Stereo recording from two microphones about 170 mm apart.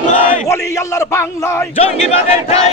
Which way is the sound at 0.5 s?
20° left (ahead or behind).